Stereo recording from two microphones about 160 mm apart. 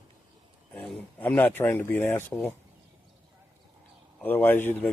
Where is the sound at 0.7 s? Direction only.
5° left (ahead or behind).